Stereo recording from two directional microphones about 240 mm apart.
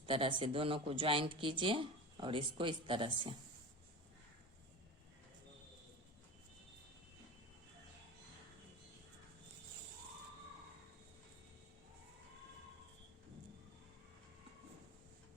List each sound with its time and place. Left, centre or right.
0.0 s speech: right